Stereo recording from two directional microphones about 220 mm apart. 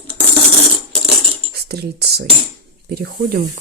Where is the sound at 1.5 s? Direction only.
45° right (ahead or behind).